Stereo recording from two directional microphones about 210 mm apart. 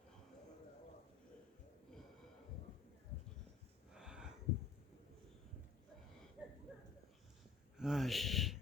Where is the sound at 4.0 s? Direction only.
5° right (ahead or behind).